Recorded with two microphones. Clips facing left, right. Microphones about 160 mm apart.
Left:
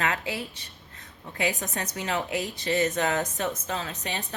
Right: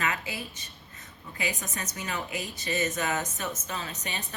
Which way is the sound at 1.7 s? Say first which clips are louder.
Left 5 dB; 70° left (ahead or behind).